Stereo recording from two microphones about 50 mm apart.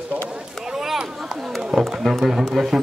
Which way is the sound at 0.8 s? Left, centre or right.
Centre.